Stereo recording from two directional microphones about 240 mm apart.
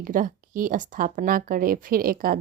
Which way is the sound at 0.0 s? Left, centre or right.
Right.